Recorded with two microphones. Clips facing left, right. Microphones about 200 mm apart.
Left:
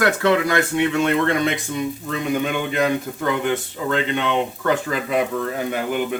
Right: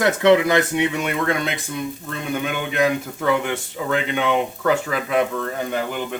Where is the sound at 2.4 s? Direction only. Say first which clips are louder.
Even; centre (ahead or behind).